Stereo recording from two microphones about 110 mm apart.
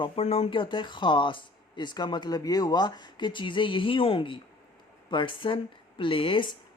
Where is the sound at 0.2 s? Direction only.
65° left (ahead or behind).